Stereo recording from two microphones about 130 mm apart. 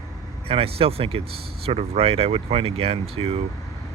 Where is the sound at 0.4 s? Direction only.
45° right (ahead or behind).